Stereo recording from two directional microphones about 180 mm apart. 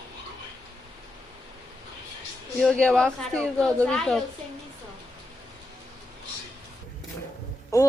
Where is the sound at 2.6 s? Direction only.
5° left (ahead or behind).